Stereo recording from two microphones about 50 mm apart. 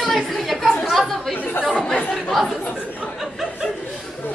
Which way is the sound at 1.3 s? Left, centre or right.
Left.